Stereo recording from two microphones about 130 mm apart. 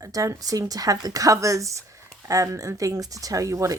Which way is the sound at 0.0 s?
25° right (ahead or behind).